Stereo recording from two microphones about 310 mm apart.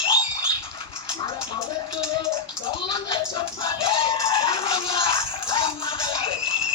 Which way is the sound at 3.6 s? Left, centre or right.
Centre.